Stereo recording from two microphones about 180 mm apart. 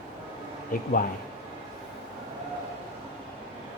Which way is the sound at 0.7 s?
50° left (ahead or behind).